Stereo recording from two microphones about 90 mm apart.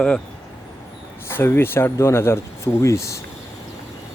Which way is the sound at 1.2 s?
25° left (ahead or behind).